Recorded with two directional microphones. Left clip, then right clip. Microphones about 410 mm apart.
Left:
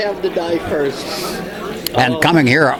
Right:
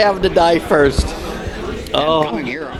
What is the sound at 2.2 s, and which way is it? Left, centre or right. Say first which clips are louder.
Speech: left 7 dB; left.